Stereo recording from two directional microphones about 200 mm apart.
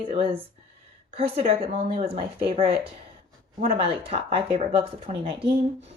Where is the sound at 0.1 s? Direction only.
25° right (ahead or behind).